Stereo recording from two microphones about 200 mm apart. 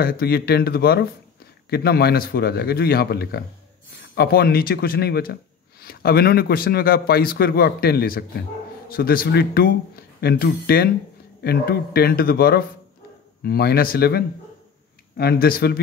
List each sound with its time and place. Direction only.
0.0 s speech: 50° left (ahead or behind)